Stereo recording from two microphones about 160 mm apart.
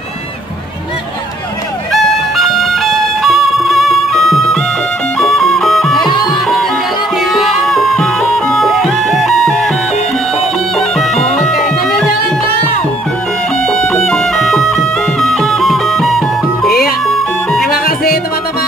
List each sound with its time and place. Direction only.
1.9 s music: centre (ahead or behind)
6.0 s music: 30° left (ahead or behind)
7.2 s music: centre (ahead or behind)
10.8 s bagpipes: centre (ahead or behind)
13.7 s music: 5° left (ahead or behind)
17.6 s music: 70° left (ahead or behind)